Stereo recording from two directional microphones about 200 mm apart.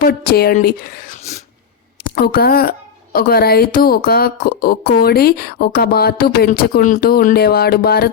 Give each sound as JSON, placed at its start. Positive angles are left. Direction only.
{"t": 0.0, "sound": "a woman's voice", "side_deg": 50}